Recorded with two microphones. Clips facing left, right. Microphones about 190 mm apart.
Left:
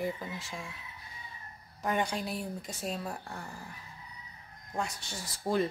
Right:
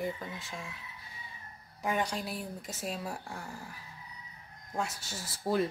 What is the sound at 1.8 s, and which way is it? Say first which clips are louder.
A woman's voice: left 1 dB; centre (ahead or behind).